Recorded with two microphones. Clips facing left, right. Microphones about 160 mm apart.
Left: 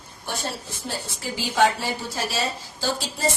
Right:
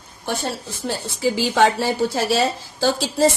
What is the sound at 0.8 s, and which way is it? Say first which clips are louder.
A woman's voice: right 10 dB; 90° right.